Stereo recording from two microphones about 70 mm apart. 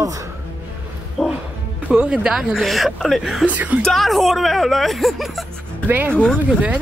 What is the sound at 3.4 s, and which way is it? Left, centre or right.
Speech, right.